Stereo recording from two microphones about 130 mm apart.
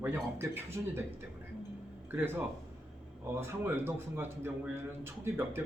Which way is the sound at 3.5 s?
15° right (ahead or behind).